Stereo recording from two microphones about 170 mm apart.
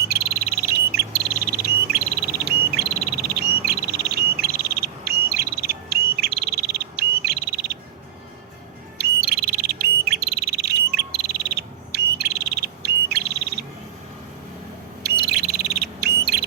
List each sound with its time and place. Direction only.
0.1 s bird: 70° right (ahead or behind)
9.0 s bird: 70° right (ahead or behind)
15.0 s a sound: 75° right (ahead or behind)